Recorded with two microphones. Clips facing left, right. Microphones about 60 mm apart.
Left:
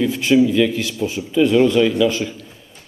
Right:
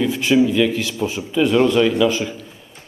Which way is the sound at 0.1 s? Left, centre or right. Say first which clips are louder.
Left 1 dB; centre.